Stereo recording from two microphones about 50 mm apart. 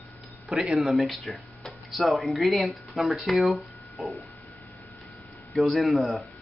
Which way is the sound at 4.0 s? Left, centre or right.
Centre.